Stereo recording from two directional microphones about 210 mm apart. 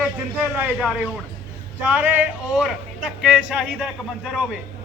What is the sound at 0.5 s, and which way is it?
Speech, 10° right (ahead or behind).